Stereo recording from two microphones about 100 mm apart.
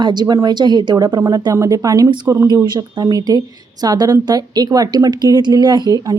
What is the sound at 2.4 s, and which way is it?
A woman's voice, 45° right (ahead or behind).